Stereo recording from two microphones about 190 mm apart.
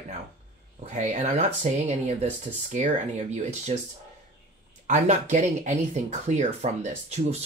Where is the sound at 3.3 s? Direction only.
35° right (ahead or behind).